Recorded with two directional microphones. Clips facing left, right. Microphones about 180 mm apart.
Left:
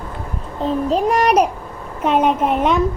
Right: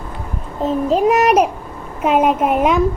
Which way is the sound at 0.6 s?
5° right (ahead or behind).